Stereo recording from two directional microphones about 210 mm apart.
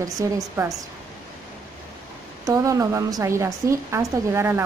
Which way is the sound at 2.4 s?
15° right (ahead or behind).